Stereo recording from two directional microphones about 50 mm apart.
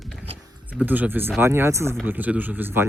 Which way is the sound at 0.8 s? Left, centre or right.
Right.